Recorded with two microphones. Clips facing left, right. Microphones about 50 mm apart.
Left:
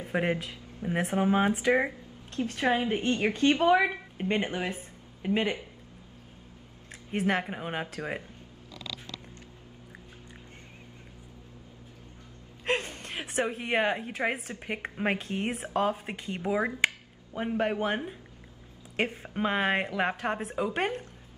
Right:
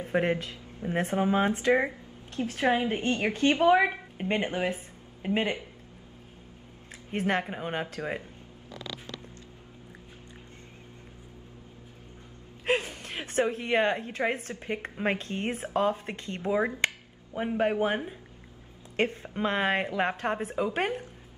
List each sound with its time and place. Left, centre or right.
0.0 s speech: centre
2.4 s a woman's voice: centre
2.8 s speech: centre
3.3 s a woman's voice: centre
7.1 s speech: centre
12.6 s gasp: centre
13.5 s speech: centre
14.5 s speech: centre